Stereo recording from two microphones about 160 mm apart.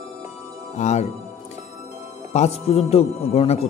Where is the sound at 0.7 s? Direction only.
45° left (ahead or behind).